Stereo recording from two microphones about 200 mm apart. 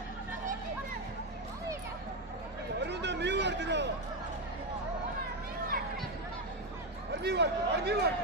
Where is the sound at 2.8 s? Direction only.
60° right (ahead or behind).